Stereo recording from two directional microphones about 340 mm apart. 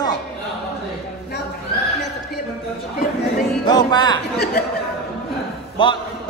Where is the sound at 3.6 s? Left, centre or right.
Centre.